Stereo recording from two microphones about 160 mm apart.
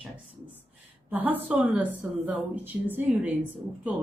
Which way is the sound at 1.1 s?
10° right (ahead or behind).